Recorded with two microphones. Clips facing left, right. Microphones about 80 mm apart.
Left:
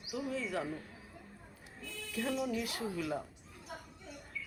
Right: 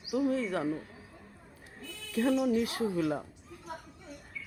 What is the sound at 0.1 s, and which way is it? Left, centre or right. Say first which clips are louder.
Speech: right 8 dB; right.